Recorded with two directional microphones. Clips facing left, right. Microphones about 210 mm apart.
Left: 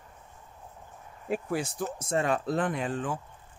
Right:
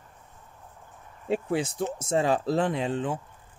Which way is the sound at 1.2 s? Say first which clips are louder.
Right 4 dB; 25° right (ahead or behind).